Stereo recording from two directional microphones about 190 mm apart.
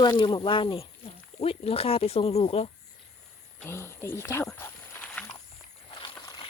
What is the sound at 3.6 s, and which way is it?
Speech, 15° left (ahead or behind).